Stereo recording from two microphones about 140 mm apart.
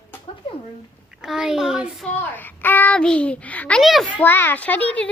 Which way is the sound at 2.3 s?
15° left (ahead or behind).